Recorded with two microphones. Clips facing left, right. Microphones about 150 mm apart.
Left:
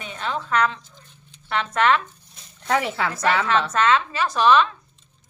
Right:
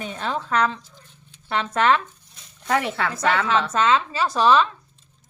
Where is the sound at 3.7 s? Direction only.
25° right (ahead or behind).